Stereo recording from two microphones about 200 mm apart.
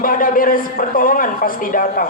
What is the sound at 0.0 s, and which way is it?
A man's voice, 45° left (ahead or behind).